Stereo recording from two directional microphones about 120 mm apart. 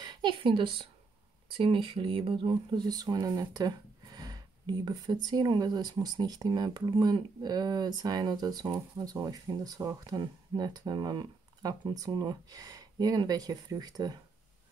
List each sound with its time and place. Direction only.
0.0 s a woman's voice: 40° right (ahead or behind)